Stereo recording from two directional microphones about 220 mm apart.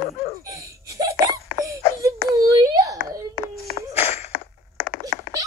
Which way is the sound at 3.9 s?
30° left (ahead or behind).